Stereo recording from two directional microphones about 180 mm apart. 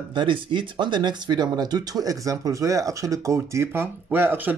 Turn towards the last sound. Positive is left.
turn(degrees=-10)  # may be behind; listen again after turning